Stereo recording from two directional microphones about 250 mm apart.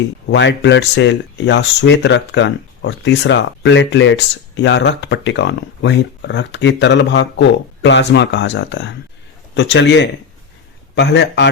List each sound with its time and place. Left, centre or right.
0.3 s speech: left